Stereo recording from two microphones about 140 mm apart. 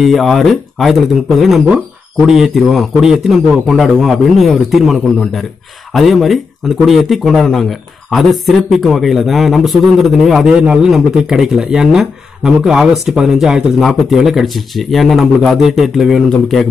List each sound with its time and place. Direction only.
0.0 s speech: centre (ahead or behind)